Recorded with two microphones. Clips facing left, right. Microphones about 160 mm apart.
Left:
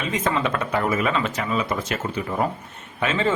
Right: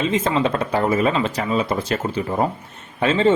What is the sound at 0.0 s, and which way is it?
Speech, 30° right (ahead or behind).